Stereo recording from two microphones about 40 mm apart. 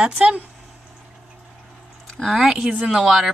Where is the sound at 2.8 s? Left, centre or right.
Centre.